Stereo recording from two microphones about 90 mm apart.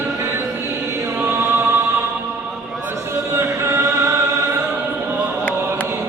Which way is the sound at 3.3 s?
30° right (ahead or behind).